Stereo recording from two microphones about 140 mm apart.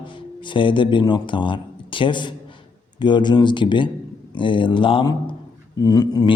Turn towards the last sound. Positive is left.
turn(degrees=30)  # may be behind; listen again after turning